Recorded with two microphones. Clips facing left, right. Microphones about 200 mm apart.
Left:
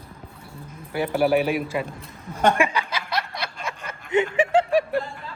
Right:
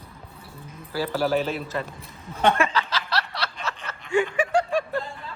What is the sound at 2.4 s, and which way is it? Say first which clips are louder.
Snicker: left 1 dB; 15° left (ahead or behind).